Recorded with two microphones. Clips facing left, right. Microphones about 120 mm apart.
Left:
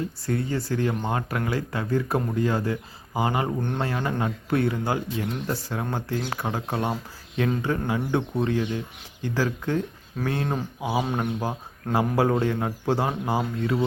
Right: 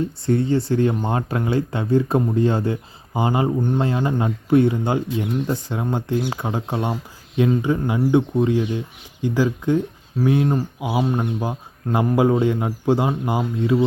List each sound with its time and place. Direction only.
0.3 s speech: 25° right (ahead or behind)
10.4 s speech: centre (ahead or behind)
10.8 s speech: 15° right (ahead or behind)
11.0 s speech: centre (ahead or behind)
12.1 s speech: 15° right (ahead or behind)